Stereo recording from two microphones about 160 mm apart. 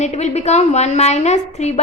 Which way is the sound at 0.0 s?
45° left (ahead or behind).